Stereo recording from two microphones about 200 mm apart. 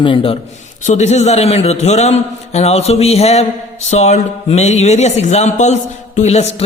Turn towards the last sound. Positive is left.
turn(degrees=35)  # may be behind; listen again after turning